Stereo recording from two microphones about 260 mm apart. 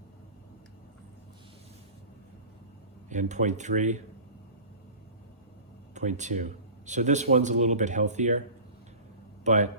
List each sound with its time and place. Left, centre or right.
3.1 s speech: right
5.9 s speech: right
9.4 s speech: right